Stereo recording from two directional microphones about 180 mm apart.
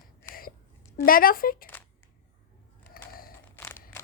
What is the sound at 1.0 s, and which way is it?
Speech, 50° left (ahead or behind).